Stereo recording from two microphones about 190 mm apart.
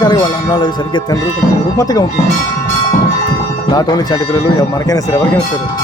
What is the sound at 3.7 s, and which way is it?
Speech, 20° left (ahead or behind).